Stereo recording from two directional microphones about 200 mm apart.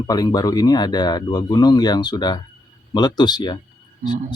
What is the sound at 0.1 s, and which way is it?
Speech, 20° left (ahead or behind).